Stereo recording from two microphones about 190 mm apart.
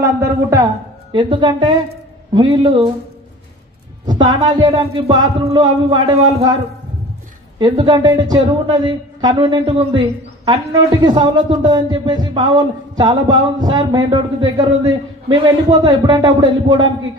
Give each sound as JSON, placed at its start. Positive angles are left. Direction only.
{"t": 0.0, "sound": "a woman's voice", "side_deg": -15}
{"t": 4.0, "sound": "a woman's voice", "side_deg": -20}